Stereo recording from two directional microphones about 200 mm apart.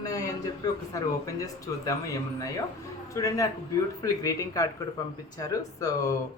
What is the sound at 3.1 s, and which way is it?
A woman's voice, 15° left (ahead or behind).